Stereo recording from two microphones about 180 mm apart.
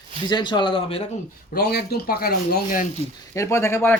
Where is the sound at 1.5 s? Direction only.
60° left (ahead or behind).